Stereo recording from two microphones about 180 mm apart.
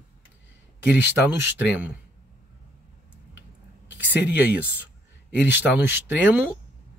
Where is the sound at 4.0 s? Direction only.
10° right (ahead or behind).